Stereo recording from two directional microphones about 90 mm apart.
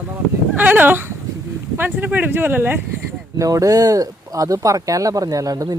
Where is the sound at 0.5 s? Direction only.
20° right (ahead or behind).